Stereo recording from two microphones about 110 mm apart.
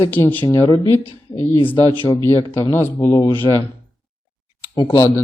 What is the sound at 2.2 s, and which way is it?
A man's voice, 25° left (ahead or behind).